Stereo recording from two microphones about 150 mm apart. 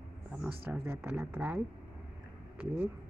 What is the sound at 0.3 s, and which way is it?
Speech, 5° right (ahead or behind).